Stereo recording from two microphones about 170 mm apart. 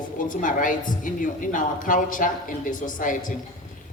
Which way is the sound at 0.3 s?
50° left (ahead or behind).